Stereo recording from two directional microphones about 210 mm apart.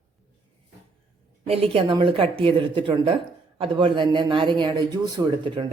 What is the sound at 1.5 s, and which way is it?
Speech, 25° right (ahead or behind).